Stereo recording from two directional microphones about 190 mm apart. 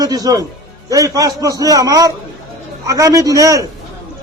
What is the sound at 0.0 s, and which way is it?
A man's voice, 20° right (ahead or behind).